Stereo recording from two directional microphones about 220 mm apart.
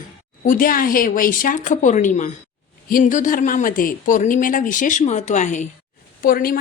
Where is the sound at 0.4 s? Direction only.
40° left (ahead or behind).